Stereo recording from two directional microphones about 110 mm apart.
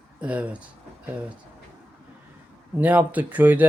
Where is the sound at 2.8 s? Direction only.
15° right (ahead or behind).